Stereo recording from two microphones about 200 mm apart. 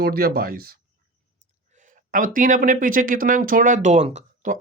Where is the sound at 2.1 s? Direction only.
40° right (ahead or behind).